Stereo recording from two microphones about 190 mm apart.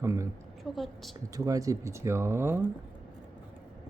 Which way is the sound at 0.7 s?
Centre (ahead or behind).